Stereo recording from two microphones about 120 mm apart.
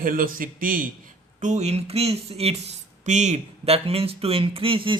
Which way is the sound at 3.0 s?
75° right (ahead or behind).